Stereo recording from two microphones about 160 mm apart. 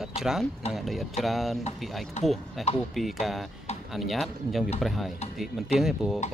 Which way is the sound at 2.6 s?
Centre (ahead or behind).